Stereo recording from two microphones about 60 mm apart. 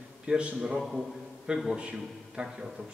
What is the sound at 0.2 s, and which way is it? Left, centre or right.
A man's voice, centre.